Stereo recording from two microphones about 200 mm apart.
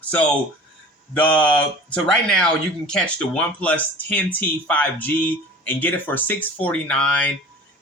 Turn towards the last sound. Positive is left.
turn(degrees=5)  # may be behind; listen again after turning